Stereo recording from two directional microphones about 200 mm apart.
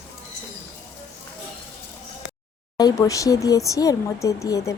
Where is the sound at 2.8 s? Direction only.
20° left (ahead or behind).